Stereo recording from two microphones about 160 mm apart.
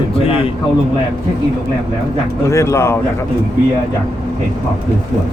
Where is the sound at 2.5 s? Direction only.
20° left (ahead or behind).